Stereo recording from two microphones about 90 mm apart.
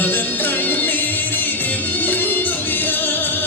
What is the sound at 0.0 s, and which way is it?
Music, 20° left (ahead or behind).